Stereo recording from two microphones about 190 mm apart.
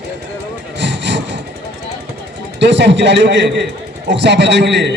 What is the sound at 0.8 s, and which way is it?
Vehicle, 65° right (ahead or behind).